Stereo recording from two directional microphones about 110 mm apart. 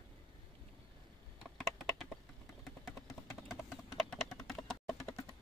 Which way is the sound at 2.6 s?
5° right (ahead or behind).